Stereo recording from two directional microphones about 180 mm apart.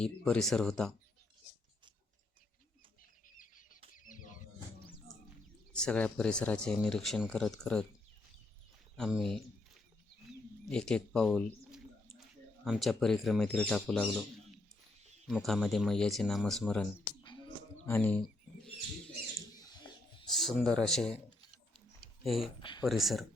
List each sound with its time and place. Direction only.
0.0 s speech: 5° left (ahead or behind)
3.2 s bird flight: 50° left (ahead or behind)
4.0 s a sound: 45° left (ahead or behind)
5.7 s speech: 5° left (ahead or behind)
9.0 s speech: centre (ahead or behind)
10.7 s speech: 5° left (ahead or behind)
15.3 s speech: centre (ahead or behind)
17.0 s a sound: 25° left (ahead or behind)
17.8 s speech: 10° left (ahead or behind)
20.3 s speech: centre (ahead or behind)
21.7 s a sound: centre (ahead or behind)
22.8 s speech: centre (ahead or behind)